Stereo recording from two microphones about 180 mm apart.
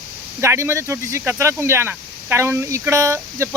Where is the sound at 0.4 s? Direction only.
15° right (ahead or behind).